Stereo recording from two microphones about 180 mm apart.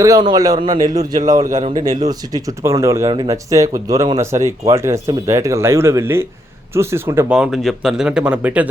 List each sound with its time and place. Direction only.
0.0 s speech: 20° right (ahead or behind)
1.4 s a man's voice: 40° right (ahead or behind)
1.7 s speech: 20° right (ahead or behind)